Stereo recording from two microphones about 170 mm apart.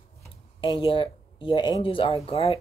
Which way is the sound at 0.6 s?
30° left (ahead or behind).